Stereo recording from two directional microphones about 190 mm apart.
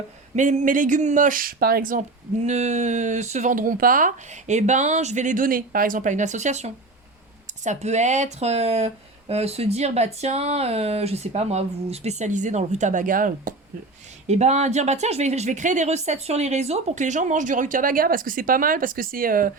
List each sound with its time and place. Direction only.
0.3 s speech: 40° right (ahead or behind)